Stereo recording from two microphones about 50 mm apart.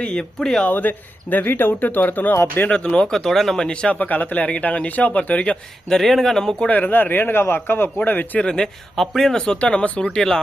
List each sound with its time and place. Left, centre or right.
0.0 s speech: centre
0.6 s speech: left
2.6 s speech: centre
3.1 s speech: centre
3.7 s speech: centre
3.9 s speech: left
5.9 s speech: centre
6.7 s speech: left
8.4 s speech: centre
9.4 s speech: centre
10.2 s speech: centre